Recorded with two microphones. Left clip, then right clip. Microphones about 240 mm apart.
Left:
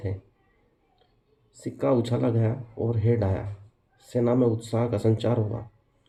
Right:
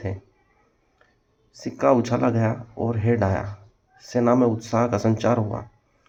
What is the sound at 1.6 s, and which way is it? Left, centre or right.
Speech, right.